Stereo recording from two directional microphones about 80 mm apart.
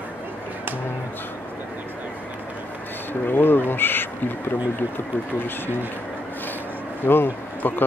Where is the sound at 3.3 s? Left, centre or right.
Left.